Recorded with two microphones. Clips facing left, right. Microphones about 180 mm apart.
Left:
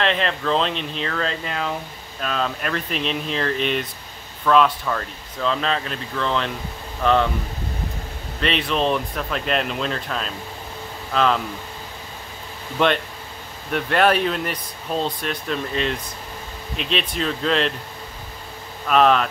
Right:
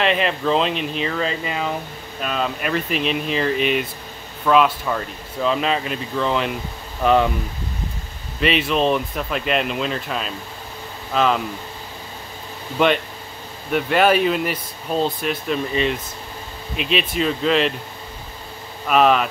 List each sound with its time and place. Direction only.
0.0 s speech: 5° right (ahead or behind)
8.4 s speech: 5° right (ahead or behind)
12.7 s speech: 5° right (ahead or behind)
18.9 s speech: 5° right (ahead or behind)